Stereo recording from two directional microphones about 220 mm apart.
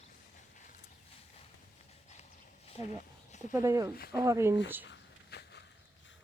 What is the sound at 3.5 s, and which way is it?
Speech, 15° right (ahead or behind).